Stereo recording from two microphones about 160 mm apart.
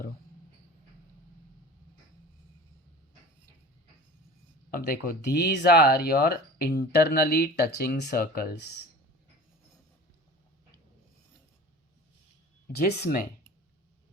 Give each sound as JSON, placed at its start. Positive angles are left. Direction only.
{"t": 4.7, "sound": "speech", "side_deg": 70}
{"t": 12.7, "sound": "speech", "side_deg": 70}